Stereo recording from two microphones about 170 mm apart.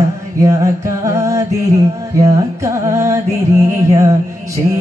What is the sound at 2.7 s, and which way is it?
Music, 15° right (ahead or behind).